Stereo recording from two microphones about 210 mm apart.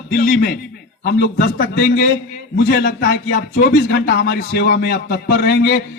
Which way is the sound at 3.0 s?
65° left (ahead or behind).